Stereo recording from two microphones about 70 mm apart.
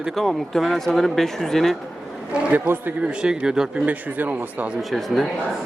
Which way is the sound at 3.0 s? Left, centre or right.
Centre.